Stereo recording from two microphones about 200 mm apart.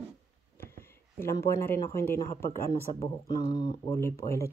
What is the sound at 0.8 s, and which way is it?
Speech, 10° left (ahead or behind).